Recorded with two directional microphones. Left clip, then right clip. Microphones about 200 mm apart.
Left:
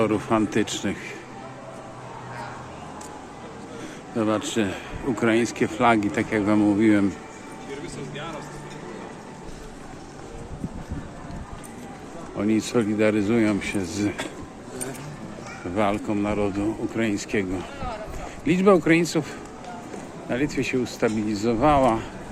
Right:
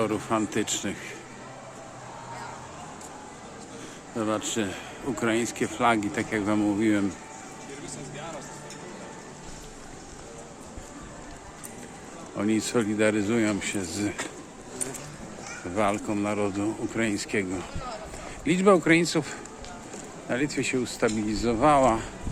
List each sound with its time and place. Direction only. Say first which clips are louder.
0.0 s a man's voice: left 4 dB; 5° left (ahead or behind)
4.2 s a man's voice: left 4 dB; centre (ahead or behind)
12.4 s speech: left 3 dB; 15° right (ahead or behind)
15.7 s speech: left 2 dB; 10° right (ahead or behind)
18.4 s speech: left 2 dB; 15° right (ahead or behind)